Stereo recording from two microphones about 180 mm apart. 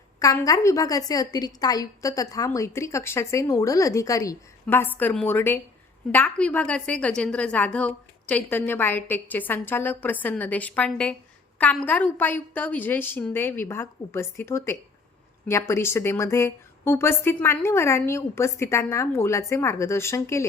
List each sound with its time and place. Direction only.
0.2 s a woman's voice: 20° left (ahead or behind)